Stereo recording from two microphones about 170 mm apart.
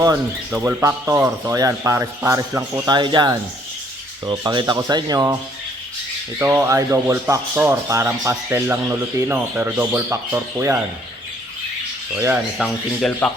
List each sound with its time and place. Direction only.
0.6 s speech: 15° right (ahead or behind)
6.4 s speech: 10° right (ahead or behind)
12.1 s speech: 10° right (ahead or behind)
12.5 s speech: 5° left (ahead or behind)